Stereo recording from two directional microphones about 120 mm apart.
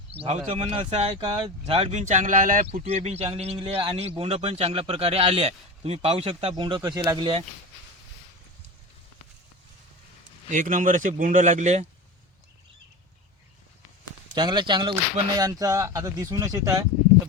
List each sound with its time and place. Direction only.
0.1 s speech: 60° right (ahead or behind); by 7.3 s 30° right (ahead or behind)
10.5 s speech: 90° right; by 11.9 s 70° right (ahead or behind)
14.3 s speech: 35° right (ahead or behind)